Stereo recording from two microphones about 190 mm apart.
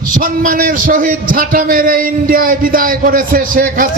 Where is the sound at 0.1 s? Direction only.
45° right (ahead or behind).